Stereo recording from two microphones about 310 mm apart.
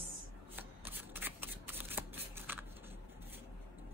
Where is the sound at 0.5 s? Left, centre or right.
Centre.